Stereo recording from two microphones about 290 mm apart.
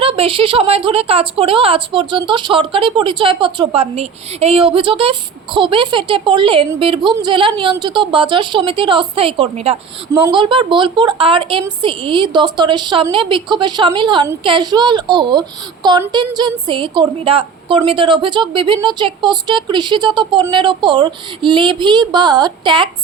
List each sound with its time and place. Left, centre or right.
0.0 s a woman's voice: centre